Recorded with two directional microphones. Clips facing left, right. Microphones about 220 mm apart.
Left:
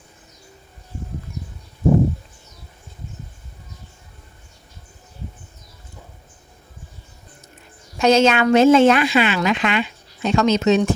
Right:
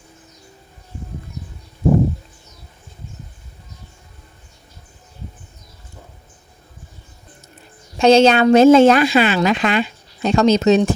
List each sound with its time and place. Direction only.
7.9 s speech: 30° right (ahead or behind)